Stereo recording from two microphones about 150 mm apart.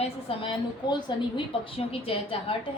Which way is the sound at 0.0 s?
35° left (ahead or behind).